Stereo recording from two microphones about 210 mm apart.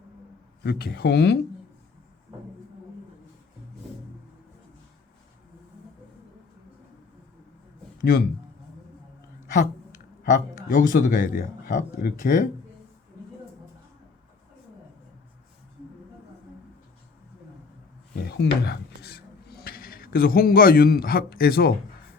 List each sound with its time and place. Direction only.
0.6 s speech: 50° left (ahead or behind)
10.2 s a man's voice: 40° left (ahead or behind)
18.1 s rub: 50° left (ahead or behind)